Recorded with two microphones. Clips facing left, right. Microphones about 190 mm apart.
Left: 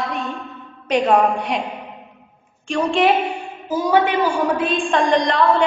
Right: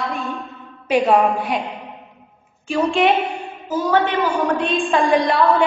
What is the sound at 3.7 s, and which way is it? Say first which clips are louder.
A woman's voice: left 1 dB; 10° left (ahead or behind).